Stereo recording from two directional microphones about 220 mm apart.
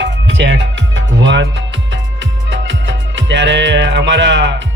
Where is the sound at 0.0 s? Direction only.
55° right (ahead or behind).